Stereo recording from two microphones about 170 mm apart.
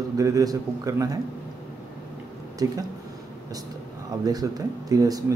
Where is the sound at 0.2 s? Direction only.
20° right (ahead or behind).